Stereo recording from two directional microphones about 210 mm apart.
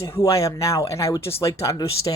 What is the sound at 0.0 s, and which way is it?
Speech, 15° left (ahead or behind).